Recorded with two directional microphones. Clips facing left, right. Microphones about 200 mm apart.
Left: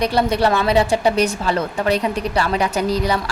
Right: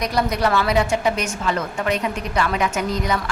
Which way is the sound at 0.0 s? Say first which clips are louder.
Left 4 dB; 30° left (ahead or behind).